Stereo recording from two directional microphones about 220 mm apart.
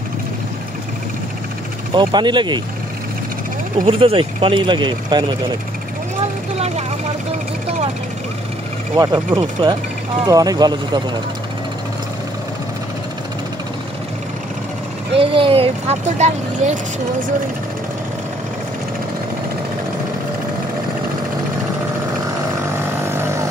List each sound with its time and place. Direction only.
2.0 s speech: 20° right (ahead or behind)
3.8 s speech: 25° right (ahead or behind)
8.9 s speech: 20° right (ahead or behind)
15.1 s speech: 25° right (ahead or behind)
22.7 s vehicle: 10° right (ahead or behind)